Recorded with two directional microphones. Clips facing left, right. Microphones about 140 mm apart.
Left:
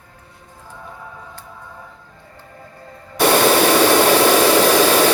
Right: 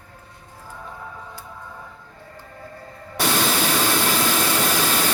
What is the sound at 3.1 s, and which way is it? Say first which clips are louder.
Hair dryer: left 9 dB; 65° left (ahead or behind).